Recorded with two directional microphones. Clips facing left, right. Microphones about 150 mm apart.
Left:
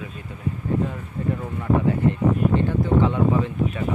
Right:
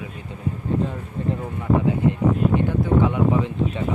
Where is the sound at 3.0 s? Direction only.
15° right (ahead or behind).